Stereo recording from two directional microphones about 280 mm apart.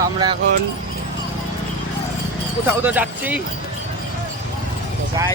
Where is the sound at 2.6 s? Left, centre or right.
Centre.